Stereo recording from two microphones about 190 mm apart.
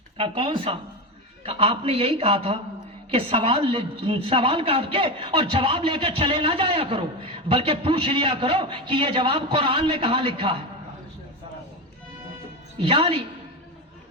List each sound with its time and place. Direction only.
0.2 s a woman's voice: 30° right (ahead or behind)
12.8 s a woman's voice: 30° right (ahead or behind)